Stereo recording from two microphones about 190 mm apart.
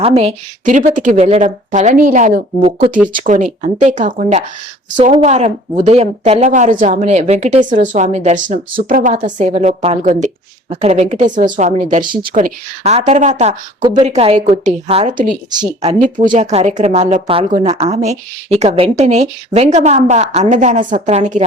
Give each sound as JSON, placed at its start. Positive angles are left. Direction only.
{"t": 0.0, "sound": "a woman's voice", "side_deg": -30}
{"t": 3.1, "sound": "a woman's voice", "side_deg": -45}
{"t": 16.4, "sound": "a woman's voice", "side_deg": -35}